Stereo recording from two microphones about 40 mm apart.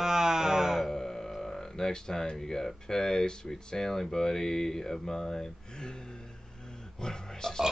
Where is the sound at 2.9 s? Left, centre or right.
Centre.